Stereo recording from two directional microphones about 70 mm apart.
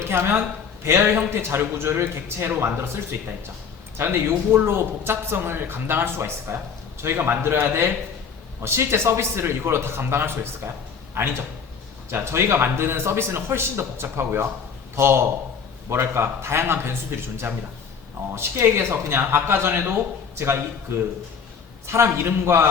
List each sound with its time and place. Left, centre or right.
0.0 s a man's voice: right